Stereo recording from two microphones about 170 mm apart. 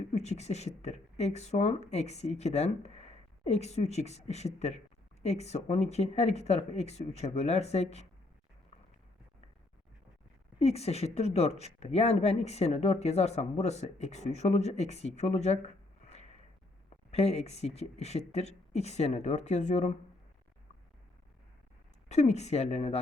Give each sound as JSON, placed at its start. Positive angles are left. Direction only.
{"t": 0.1, "sound": "speech", "side_deg": 40}
{"t": 10.6, "sound": "speech", "side_deg": 40}
{"t": 22.1, "sound": "speech", "side_deg": 40}